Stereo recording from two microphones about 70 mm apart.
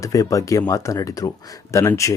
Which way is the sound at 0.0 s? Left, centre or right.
Left.